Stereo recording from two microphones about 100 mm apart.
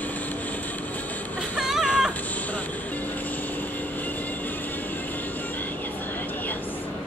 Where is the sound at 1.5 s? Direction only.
5° right (ahead or behind).